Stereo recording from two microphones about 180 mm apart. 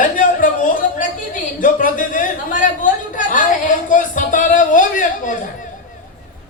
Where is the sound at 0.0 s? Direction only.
45° left (ahead or behind).